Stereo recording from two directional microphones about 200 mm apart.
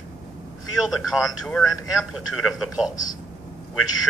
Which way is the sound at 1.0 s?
Centre (ahead or behind).